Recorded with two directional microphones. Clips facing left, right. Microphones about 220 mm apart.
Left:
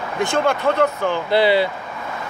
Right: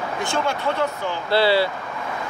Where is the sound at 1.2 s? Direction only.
20° left (ahead or behind).